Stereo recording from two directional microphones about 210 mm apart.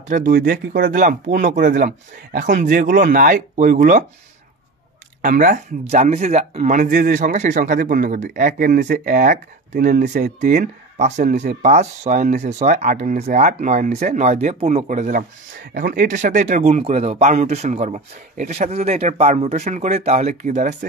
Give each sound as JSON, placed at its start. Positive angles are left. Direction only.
{"t": 0.1, "sound": "speech", "side_deg": -40}
{"t": 5.2, "sound": "speech", "side_deg": -40}